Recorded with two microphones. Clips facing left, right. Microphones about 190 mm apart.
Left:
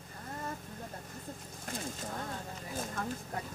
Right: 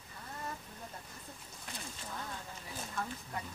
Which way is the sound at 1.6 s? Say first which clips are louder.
Left 7 dB; 45° left (ahead or behind).